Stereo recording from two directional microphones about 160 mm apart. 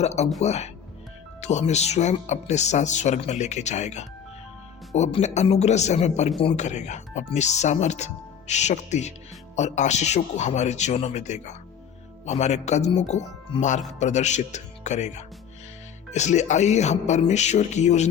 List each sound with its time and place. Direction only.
0.0 s speech: 40° left (ahead or behind)